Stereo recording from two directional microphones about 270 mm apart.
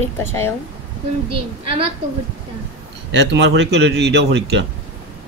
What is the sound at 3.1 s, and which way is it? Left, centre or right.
Speech, right.